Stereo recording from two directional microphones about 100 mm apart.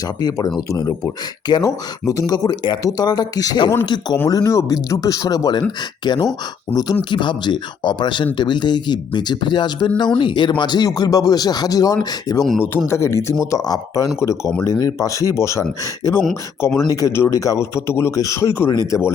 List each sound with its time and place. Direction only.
0.2 s speech: 40° left (ahead or behind)
4.3 s speech: 35° left (ahead or behind)
12.9 s speech: 25° left (ahead or behind)